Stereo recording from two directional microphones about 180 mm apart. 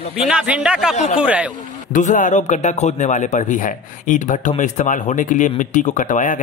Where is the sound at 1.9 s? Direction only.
45° left (ahead or behind).